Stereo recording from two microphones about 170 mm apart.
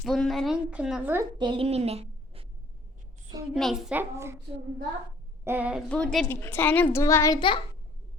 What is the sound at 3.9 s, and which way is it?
Speech, 15° right (ahead or behind).